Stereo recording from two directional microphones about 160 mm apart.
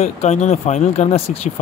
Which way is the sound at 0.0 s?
45° left (ahead or behind).